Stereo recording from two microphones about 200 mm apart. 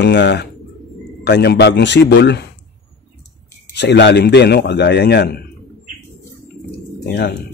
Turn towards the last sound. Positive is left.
turn(degrees=60)  # may be behind; listen again after turning